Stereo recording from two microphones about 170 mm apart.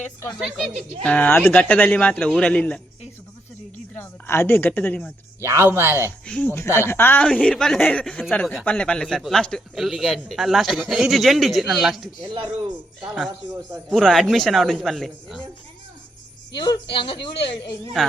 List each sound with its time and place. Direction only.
0.0 s speech: 15° left (ahead or behind)
0.3 s a man's voice: centre (ahead or behind)
1.0 s speech: 10° left (ahead or behind)
3.9 s speech: 10° left (ahead or behind)
5.4 s speech: 15° right (ahead or behind)
6.2 s a man's voice: 10° left (ahead or behind)
12.2 s speech: 25° right (ahead or behind)
13.9 s a man's voice: centre (ahead or behind)
16.9 s speech: 30° left (ahead or behind)
18.0 s a man's voice: 5° left (ahead or behind)